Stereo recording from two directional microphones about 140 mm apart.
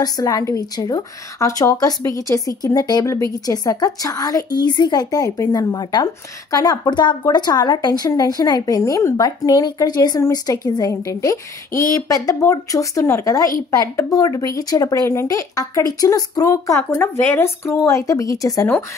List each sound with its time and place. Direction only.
0.0 s a woman's voice: 25° left (ahead or behind)